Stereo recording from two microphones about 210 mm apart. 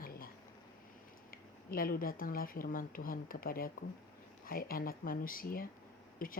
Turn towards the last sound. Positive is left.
turn(degrees=40)  # may be behind; listen again after turning